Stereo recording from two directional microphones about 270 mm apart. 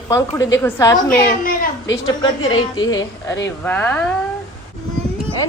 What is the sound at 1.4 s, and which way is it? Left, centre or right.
Speech, left.